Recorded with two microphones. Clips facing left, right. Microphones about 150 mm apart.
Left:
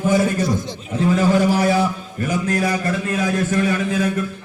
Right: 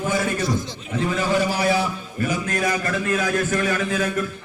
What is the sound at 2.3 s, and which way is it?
A man's voice, 35° left (ahead or behind).